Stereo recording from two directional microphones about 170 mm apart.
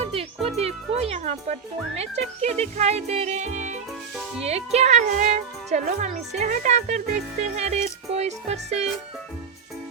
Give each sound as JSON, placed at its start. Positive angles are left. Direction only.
{"t": 0.0, "sound": "music", "side_deg": -35}
{"t": 0.4, "sound": "speech", "side_deg": -35}